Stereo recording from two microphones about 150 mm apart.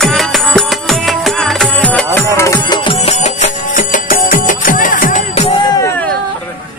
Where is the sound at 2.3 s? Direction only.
20° left (ahead or behind); by 5.2 s 60° left (ahead or behind).